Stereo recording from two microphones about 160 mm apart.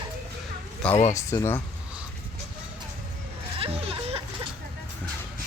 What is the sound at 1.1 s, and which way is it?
Speech, 20° left (ahead or behind).